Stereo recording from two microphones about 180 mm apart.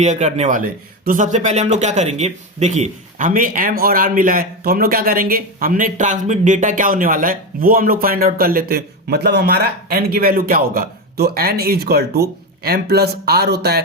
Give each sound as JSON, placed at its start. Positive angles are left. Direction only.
{"t": 0.0, "sound": "speech", "side_deg": -40}